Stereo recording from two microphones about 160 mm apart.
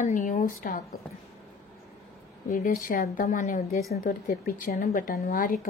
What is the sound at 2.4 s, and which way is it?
Speech, 55° left (ahead or behind).